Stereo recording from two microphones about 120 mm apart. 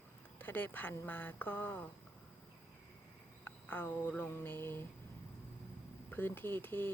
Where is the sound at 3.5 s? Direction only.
15° left (ahead or behind).